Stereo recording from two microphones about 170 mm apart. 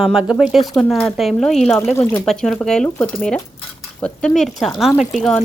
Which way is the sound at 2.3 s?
Centre (ahead or behind).